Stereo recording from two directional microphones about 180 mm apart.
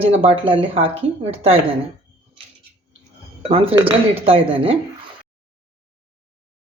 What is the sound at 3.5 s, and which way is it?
Speech, 30° right (ahead or behind).